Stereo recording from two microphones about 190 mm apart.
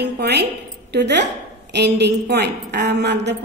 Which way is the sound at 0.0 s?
60° right (ahead or behind).